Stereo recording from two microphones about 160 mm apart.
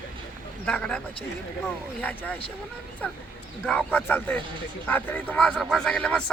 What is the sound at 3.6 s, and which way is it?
Speech, 10° left (ahead or behind).